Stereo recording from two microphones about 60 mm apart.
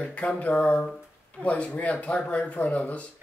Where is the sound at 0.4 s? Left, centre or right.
Left.